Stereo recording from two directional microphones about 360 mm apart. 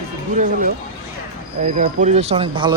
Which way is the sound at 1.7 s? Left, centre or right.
Centre.